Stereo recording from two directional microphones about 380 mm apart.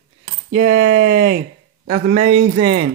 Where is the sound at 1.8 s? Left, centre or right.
Centre.